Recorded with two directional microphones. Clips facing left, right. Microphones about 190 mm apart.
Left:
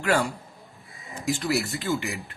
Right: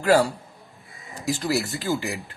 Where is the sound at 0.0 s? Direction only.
35° right (ahead or behind).